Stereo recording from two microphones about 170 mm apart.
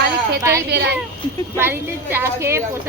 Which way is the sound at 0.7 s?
80° right.